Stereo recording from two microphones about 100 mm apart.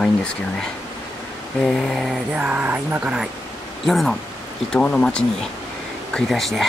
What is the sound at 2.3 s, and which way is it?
Speech, 15° right (ahead or behind).